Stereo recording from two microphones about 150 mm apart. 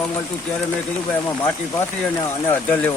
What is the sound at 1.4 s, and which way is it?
Speech, 15° left (ahead or behind).